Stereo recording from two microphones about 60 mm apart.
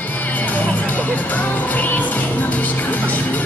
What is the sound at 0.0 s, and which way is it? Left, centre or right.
Music, left.